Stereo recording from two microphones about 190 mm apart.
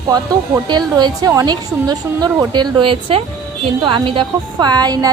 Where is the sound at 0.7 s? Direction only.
20° right (ahead or behind).